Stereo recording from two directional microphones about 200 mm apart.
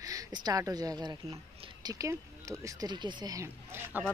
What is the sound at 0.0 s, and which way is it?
Speech, 15° right (ahead or behind).